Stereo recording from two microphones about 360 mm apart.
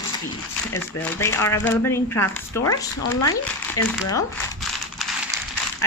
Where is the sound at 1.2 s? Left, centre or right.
Centre.